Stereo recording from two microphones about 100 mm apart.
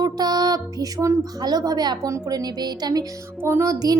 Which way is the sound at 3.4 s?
25° right (ahead or behind).